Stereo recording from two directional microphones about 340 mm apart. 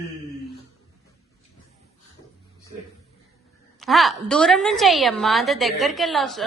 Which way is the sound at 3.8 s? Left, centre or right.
Centre.